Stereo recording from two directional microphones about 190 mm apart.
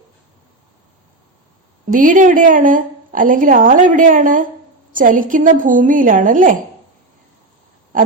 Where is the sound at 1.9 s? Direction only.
45° right (ahead or behind).